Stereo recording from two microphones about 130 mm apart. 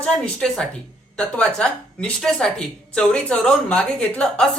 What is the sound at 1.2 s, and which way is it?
A woman's voice, 10° left (ahead or behind).